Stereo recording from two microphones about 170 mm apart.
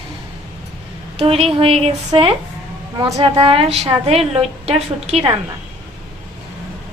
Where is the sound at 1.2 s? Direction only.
35° right (ahead or behind).